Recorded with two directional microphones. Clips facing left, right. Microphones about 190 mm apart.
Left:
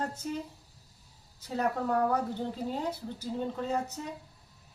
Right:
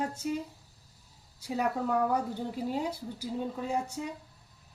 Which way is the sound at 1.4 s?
10° right (ahead or behind).